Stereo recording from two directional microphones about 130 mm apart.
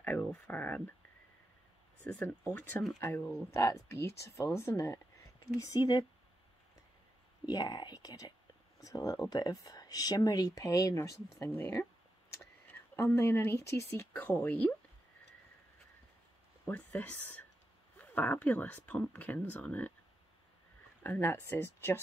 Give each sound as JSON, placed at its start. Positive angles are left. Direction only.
{"t": 0.0, "sound": "speech", "side_deg": 10}
{"t": 2.0, "sound": "speech", "side_deg": 10}
{"t": 7.4, "sound": "speech", "side_deg": 30}
{"t": 16.6, "sound": "speech", "side_deg": 10}
{"t": 21.0, "sound": "speech", "side_deg": 15}